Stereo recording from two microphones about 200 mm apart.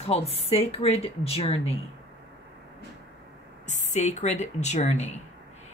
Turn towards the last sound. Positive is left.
turn(degrees=35)  # may be behind; listen again after turning